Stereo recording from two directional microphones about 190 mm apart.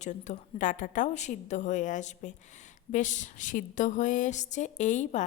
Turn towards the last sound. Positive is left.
turn(degrees=40)  # may be behind; listen again after turning